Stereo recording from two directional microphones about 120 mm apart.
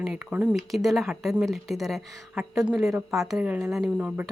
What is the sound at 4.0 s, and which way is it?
Speech, 10° right (ahead or behind).